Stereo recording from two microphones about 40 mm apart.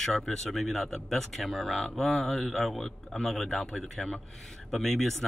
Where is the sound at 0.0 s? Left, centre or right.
Centre.